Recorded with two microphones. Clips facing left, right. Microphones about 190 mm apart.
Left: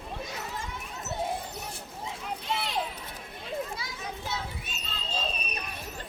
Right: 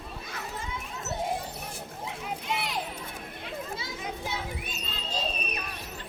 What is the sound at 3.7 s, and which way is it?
Children playing, 20° right (ahead or behind).